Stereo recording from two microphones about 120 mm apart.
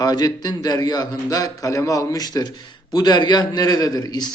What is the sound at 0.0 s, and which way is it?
A man's voice, 35° left (ahead or behind).